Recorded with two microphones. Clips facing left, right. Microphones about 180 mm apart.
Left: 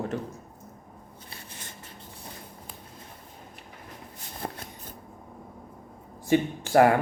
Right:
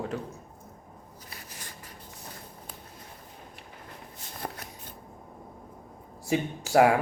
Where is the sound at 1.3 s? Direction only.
25° left (ahead or behind).